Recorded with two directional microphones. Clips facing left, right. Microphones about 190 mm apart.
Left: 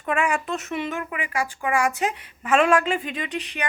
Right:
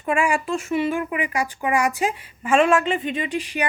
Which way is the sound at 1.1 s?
20° right (ahead or behind).